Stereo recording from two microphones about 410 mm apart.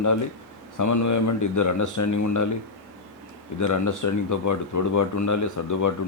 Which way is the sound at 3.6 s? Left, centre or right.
Left.